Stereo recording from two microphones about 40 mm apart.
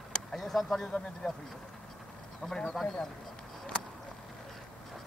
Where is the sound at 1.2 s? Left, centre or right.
Centre.